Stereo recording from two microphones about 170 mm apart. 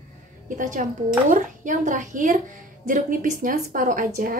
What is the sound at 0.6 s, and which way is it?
A woman's voice, 50° right (ahead or behind).